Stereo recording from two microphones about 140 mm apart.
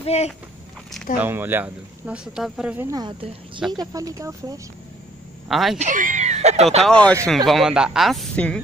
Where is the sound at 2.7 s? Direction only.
25° right (ahead or behind).